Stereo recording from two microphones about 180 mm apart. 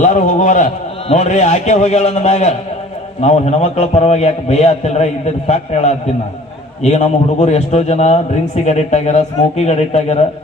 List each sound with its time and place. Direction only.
0.0 s a man's voice: 45° left (ahead or behind)